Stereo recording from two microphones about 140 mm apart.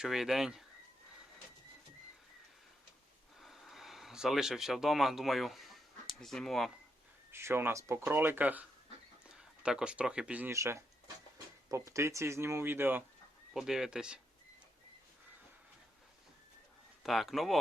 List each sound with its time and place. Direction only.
0.0 s speech: 5° right (ahead or behind)
3.4 s speech: centre (ahead or behind)
7.3 s speech: 15° right (ahead or behind)
10.5 s speech: 20° right (ahead or behind)
13.5 s speech: centre (ahead or behind)
17.0 s speech: centre (ahead or behind)